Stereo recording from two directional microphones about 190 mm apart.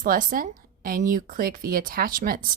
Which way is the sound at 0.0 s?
45° right (ahead or behind).